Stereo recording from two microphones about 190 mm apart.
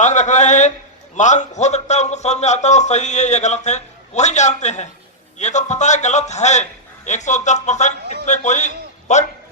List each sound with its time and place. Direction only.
0.0 s a man's voice: 40° left (ahead or behind)